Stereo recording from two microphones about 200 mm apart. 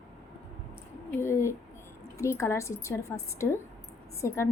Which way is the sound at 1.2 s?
15° left (ahead or behind).